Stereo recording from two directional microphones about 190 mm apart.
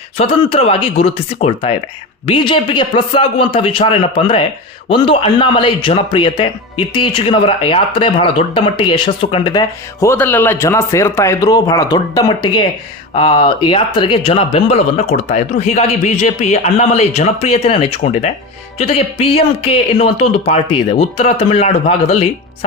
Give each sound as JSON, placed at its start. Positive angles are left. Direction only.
{"t": 0.2, "sound": "a man's voice", "side_deg": 30}